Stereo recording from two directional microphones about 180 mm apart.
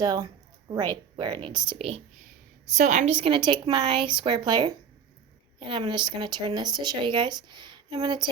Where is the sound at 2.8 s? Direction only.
45° right (ahead or behind).